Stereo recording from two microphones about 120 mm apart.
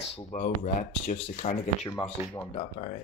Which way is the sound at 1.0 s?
65° left (ahead or behind).